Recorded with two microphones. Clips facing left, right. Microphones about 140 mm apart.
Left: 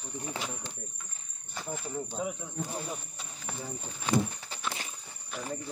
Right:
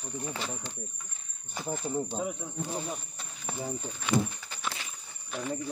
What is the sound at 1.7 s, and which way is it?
Speech, 25° right (ahead or behind).